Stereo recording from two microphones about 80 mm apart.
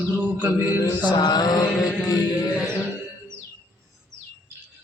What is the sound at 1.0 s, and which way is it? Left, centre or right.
Mantra, left.